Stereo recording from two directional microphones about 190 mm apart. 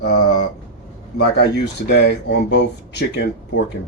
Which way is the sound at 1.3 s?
65° left (ahead or behind).